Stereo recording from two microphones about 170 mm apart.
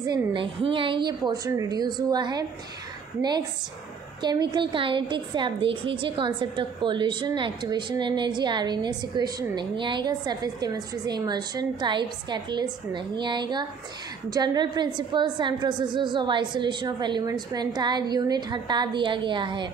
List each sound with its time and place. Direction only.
0.0 s a woman's voice: 25° right (ahead or behind)